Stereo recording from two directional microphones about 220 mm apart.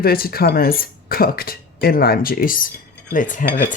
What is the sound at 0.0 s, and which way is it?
Speech, 45° left (ahead or behind).